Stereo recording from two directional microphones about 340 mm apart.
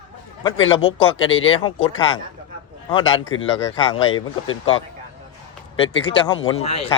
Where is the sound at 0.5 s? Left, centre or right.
Left.